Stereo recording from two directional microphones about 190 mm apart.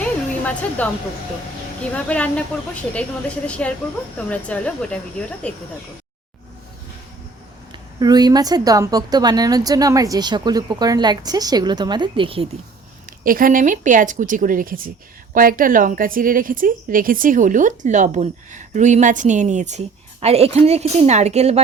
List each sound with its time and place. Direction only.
0.0 s a sound: 5° left (ahead or behind)
1.8 s a woman's voice: 5° left (ahead or behind)
7.7 s a woman's voice: 20° right (ahead or behind)
13.1 s a woman's voice: 45° right (ahead or behind)